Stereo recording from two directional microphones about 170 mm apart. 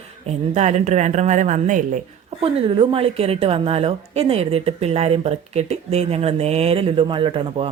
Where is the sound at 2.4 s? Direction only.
35° right (ahead or behind).